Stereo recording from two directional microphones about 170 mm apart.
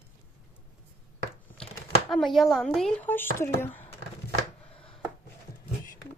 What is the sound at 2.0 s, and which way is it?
Speech, centre (ahead or behind).